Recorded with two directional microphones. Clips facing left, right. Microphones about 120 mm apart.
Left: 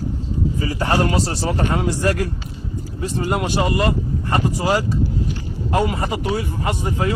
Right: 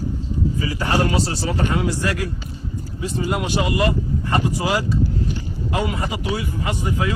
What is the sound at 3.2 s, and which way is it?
Speech, 50° left (ahead or behind).